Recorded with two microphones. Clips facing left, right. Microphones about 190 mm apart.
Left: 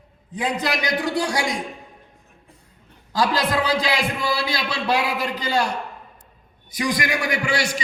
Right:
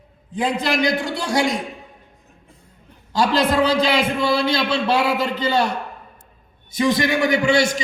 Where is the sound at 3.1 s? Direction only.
25° right (ahead or behind).